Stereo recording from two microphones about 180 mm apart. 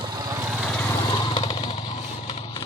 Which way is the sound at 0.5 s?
Centre (ahead or behind).